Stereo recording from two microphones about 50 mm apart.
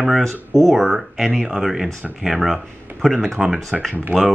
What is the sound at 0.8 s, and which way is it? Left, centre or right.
Speech, centre.